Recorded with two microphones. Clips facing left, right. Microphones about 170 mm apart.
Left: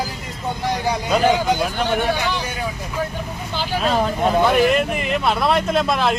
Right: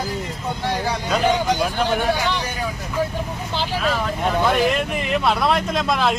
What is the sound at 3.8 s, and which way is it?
Speech, 30° left (ahead or behind).